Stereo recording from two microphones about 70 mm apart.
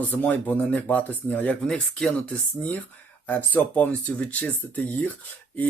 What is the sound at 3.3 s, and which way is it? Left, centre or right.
Speech, left.